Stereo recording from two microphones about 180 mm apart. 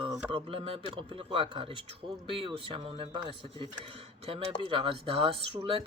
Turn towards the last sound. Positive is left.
turn(degrees=-30)  # may be behind; listen again after turning